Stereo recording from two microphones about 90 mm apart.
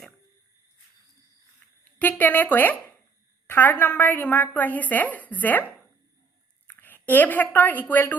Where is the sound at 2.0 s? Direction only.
20° left (ahead or behind).